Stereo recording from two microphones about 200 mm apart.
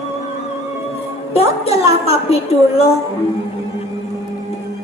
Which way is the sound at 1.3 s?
30° left (ahead or behind).